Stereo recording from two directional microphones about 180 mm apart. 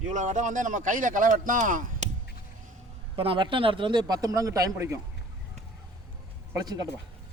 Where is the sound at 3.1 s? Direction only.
30° right (ahead or behind).